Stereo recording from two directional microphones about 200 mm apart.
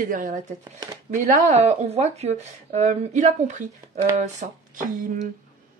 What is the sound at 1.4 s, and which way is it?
Speech, 35° right (ahead or behind).